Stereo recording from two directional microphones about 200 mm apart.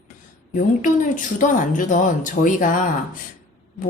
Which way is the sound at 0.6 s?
40° left (ahead or behind).